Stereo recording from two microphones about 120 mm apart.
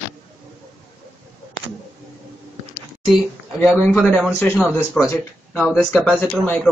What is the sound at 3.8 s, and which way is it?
Speech, 10° left (ahead or behind).